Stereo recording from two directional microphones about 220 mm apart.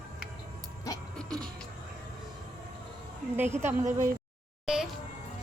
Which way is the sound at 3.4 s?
10° right (ahead or behind).